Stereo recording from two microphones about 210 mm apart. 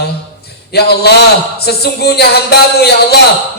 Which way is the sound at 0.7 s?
50° left (ahead or behind).